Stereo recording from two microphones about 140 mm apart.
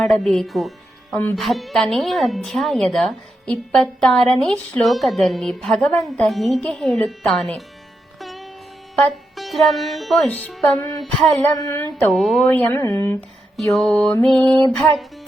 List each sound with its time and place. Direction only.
0.0 s speech: centre (ahead or behind)
1.1 s speech: 15° left (ahead or behind)
1.4 s speech: centre (ahead or behind)
8.2 s music: centre (ahead or behind)
9.0 s speech: 5° left (ahead or behind)
11.3 s speech: 25° left (ahead or behind)
12.1 s speech: centre (ahead or behind)
12.5 s speech: 10° left (ahead or behind)
13.6 s speech: centre (ahead or behind)